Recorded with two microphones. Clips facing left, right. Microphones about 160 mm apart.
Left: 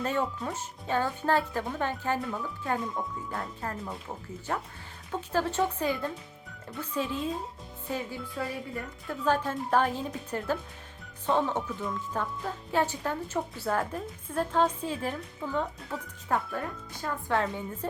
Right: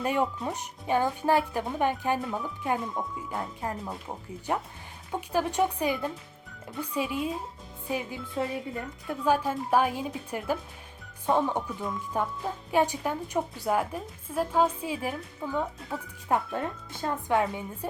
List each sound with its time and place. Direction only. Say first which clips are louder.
0.0 s speech: right 2 dB; 15° right (ahead or behind)